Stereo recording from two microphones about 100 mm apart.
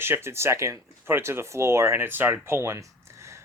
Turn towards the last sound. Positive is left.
turn(degrees=-30)  # may be behind; listen again after turning